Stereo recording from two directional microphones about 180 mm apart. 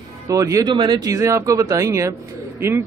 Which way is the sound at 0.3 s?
20° right (ahead or behind).